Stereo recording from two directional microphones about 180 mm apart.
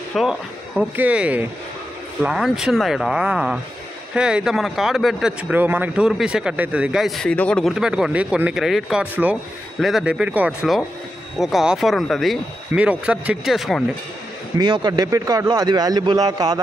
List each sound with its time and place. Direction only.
0.1 s speech: centre (ahead or behind)
14.6 s a man's voice: 25° right (ahead or behind)